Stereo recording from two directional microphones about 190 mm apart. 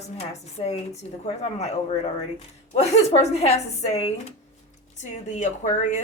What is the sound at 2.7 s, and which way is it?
Speech, 35° left (ahead or behind).